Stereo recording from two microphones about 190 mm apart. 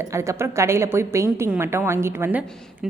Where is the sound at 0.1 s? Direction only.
15° right (ahead or behind).